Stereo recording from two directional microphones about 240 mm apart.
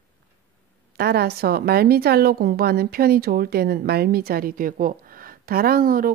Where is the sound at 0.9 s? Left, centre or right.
Right.